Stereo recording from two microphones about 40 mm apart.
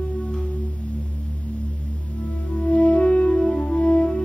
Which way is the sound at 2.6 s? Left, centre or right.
Left.